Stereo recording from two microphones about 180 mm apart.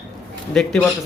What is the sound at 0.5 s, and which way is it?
Speech, 5° left (ahead or behind).